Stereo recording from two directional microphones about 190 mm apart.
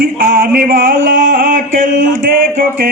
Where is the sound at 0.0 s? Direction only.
50° right (ahead or behind).